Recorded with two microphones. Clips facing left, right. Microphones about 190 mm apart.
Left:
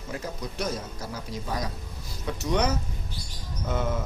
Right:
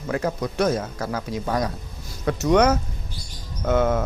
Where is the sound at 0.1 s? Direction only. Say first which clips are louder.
Right 10 dB; 70° right (ahead or behind).